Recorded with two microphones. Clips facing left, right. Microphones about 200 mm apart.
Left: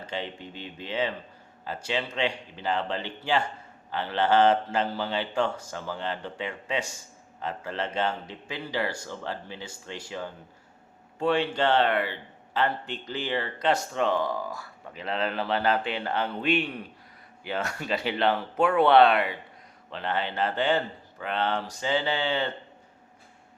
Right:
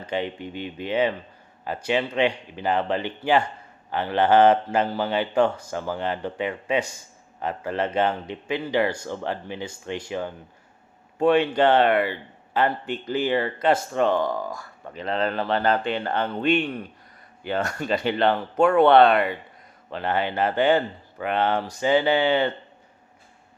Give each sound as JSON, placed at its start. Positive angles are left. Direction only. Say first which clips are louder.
{"t": 0.1, "sound": "speech", "louder": "right 8 dB", "side_deg": -55}
{"t": 14.0, "sound": "speech", "louder": "right 4 dB", "side_deg": 0}
{"t": 14.3, "sound": "speech", "louder": "right 3 dB", "side_deg": -20}
{"t": 14.5, "sound": "speech", "louder": "right 4 dB", "side_deg": 5}
{"t": 20.0, "sound": "speech", "louder": "right 4 dB", "side_deg": -55}